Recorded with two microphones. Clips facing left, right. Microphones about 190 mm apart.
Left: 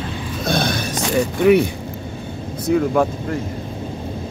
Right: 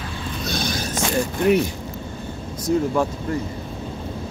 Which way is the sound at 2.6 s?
60° left (ahead or behind).